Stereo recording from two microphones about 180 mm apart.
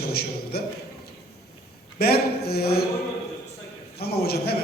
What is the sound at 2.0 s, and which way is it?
Speech, 60° left (ahead or behind).